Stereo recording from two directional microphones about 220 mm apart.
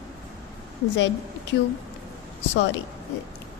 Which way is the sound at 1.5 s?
55° left (ahead or behind).